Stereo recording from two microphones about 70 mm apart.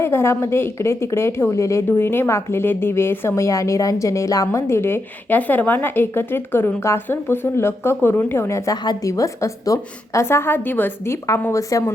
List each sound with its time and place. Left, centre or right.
0.0 s a woman's voice: left
1.9 s a woman's voice: left
5.3 s a woman's voice: left
8.7 s a woman's voice: left
9.0 s a woman's voice: left
10.2 s a woman's voice: left
11.0 s a woman's voice: left